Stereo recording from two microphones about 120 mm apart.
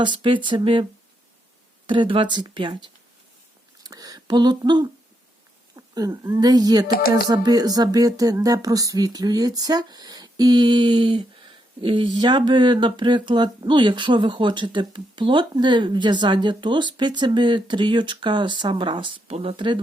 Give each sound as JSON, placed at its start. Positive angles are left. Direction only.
{"t": 0.2, "sound": "speech", "side_deg": -45}
{"t": 1.9, "sound": "speech", "side_deg": -45}